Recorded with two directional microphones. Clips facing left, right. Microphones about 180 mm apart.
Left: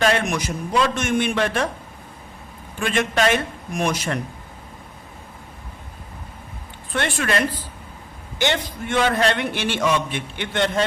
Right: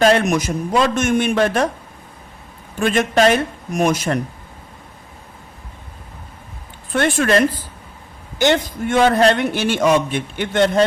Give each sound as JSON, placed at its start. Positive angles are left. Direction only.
{"t": 0.0, "sound": "a man's voice", "side_deg": -40}
{"t": 2.7, "sound": "a man's voice", "side_deg": -40}
{"t": 6.9, "sound": "a man's voice", "side_deg": -45}